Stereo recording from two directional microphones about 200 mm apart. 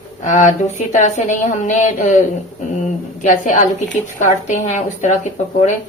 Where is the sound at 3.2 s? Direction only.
40° left (ahead or behind).